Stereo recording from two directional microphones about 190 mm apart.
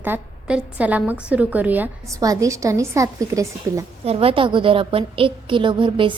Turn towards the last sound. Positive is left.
turn(degrees=-25)  # may be behind; listen again after turning